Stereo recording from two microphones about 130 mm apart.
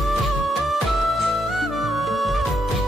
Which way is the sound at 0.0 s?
Centre (ahead or behind).